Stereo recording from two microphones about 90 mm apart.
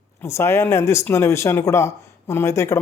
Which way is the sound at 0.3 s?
30° left (ahead or behind).